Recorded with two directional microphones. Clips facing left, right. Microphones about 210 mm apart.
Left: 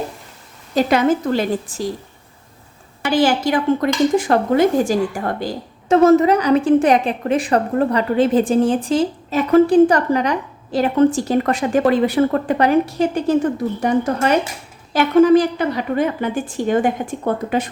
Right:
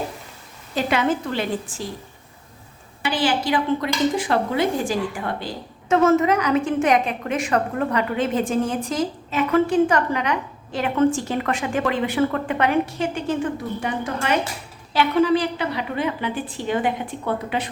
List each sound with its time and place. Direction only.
0.8 s a woman's voice: 40° left (ahead or behind)
3.0 s a woman's voice: 45° left (ahead or behind)